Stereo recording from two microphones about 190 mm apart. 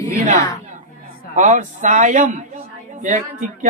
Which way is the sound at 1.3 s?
40° right (ahead or behind).